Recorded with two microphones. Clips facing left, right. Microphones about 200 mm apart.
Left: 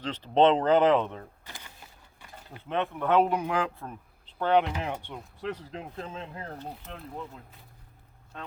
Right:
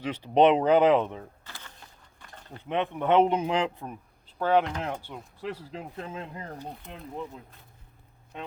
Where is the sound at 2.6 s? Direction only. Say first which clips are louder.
Right 2 dB; 15° right (ahead or behind).